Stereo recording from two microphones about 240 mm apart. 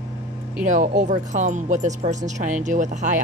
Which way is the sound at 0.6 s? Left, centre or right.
Right.